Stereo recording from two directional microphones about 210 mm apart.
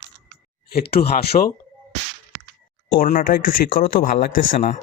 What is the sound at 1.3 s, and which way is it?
Speech, 25° left (ahead or behind).